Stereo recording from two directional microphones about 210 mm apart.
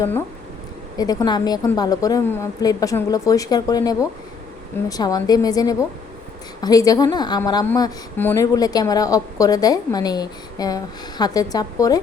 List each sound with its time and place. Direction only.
0.9 s a woman's voice: 20° left (ahead or behind)